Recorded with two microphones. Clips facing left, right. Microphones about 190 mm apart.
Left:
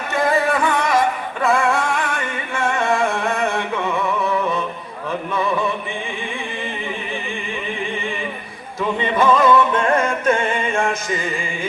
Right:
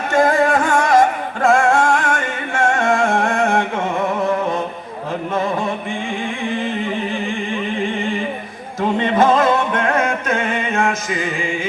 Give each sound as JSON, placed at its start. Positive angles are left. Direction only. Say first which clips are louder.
{"t": 0.2, "sound": "music", "louder": "right 3 dB", "side_deg": -50}
{"t": 9.2, "sound": "music", "louder": "left 2 dB", "side_deg": -55}